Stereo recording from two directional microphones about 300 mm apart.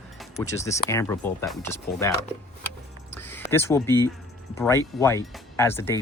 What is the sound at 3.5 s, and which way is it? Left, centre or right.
Speech, centre.